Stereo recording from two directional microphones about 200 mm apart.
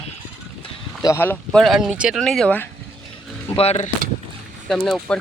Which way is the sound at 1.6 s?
Centre (ahead or behind).